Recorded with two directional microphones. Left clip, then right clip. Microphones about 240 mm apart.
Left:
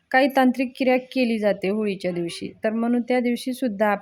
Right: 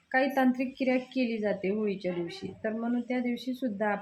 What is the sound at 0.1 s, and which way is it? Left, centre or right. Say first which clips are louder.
A woman's voice: left 8 dB; left.